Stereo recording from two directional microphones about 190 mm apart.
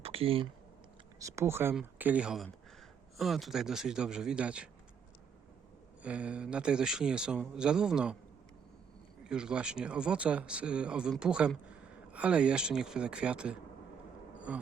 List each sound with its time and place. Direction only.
0.0 s a sound: 30° right (ahead or behind)
1.2 s speech: 15° right (ahead or behind)
6.0 s speech: 5° right (ahead or behind)
9.2 s speech: 5° right (ahead or behind)